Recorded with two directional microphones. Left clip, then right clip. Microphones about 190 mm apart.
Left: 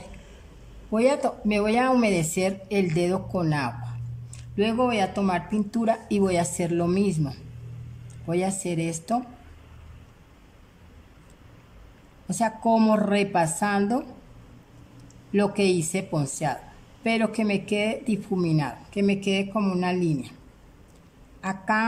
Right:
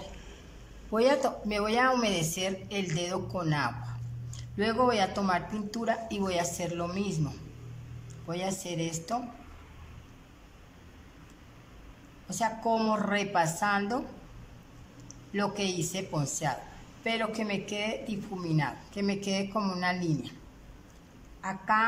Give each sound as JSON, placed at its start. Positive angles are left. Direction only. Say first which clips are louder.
{"t": 0.8, "sound": "speech", "louder": "left 3 dB", "side_deg": 15}
{"t": 12.3, "sound": "speech", "louder": "left 6 dB", "side_deg": 20}
{"t": 15.3, "sound": "speech", "louder": "left 8 dB", "side_deg": 20}
{"t": 21.4, "sound": "speech", "louder": "left 2 dB", "side_deg": 25}